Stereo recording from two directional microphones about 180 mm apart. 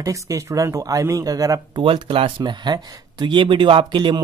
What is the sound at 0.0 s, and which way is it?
Speech, 20° right (ahead or behind).